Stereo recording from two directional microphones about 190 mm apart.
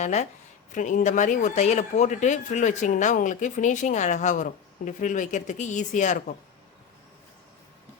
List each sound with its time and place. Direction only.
0.0 s speech: 35° left (ahead or behind)